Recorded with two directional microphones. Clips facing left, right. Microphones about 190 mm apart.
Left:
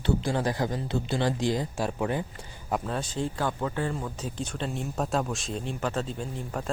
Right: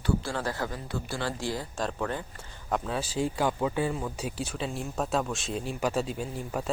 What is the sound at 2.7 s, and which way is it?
Speech, centre (ahead or behind).